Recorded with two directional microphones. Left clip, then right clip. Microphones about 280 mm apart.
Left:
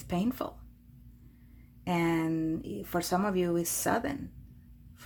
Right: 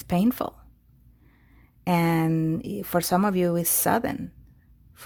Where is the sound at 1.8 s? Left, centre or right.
Right.